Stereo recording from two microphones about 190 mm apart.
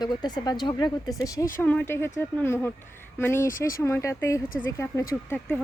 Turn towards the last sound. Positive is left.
turn(degrees=10)  # may be behind; listen again after turning